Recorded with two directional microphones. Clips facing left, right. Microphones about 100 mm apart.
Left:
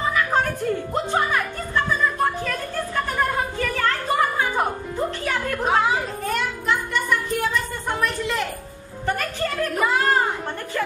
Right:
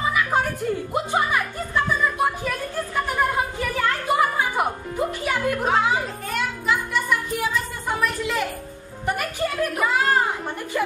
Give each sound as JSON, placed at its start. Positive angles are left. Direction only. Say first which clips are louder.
{"t": 0.1, "sound": "music", "louder": "left 2 dB", "side_deg": -10}
{"t": 0.9, "sound": "a sound", "louder": "right 1 dB", "side_deg": -10}
{"t": 3.1, "sound": "music", "louder": "right 1 dB", "side_deg": -15}
{"t": 5.7, "sound": "a sound", "louder": "left 3 dB", "side_deg": 0}
{"t": 9.0, "sound": "speech", "louder": "even", "side_deg": -10}
{"t": 9.8, "sound": "speech", "louder": "left 1 dB", "side_deg": 0}